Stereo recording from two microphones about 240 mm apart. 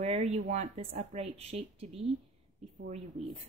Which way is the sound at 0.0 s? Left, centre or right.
Right.